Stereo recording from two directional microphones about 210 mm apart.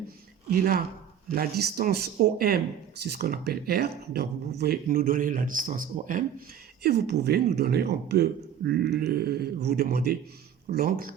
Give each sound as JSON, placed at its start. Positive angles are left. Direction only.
{"t": 0.5, "sound": "speech", "side_deg": -45}
{"t": 6.8, "sound": "speech", "side_deg": -50}